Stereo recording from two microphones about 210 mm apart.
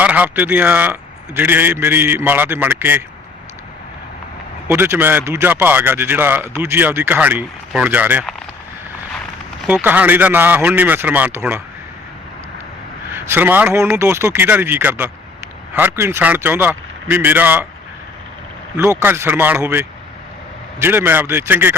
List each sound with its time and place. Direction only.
0.0 s a man's voice: 5° right (ahead or behind)
4.7 s a man's voice: 10° right (ahead or behind)
9.6 s a man's voice: 5° right (ahead or behind)
13.1 s a man's voice: 10° right (ahead or behind)
18.8 s a man's voice: 10° right (ahead or behind)